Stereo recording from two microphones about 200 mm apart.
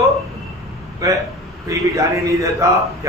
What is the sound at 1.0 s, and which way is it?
A man's voice, 15° right (ahead or behind).